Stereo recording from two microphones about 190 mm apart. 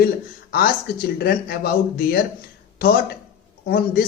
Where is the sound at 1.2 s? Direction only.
55° left (ahead or behind).